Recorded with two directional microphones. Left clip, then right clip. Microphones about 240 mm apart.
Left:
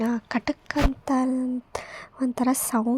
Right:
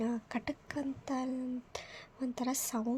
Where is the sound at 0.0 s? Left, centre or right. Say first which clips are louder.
Left 10 dB; centre.